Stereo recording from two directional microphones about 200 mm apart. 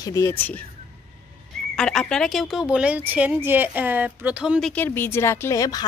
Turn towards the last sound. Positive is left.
turn(degrees=20)  # may be behind; listen again after turning